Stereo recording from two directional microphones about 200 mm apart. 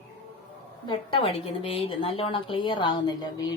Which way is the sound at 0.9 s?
25° left (ahead or behind).